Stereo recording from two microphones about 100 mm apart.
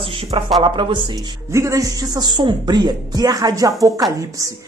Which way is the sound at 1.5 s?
30° right (ahead or behind).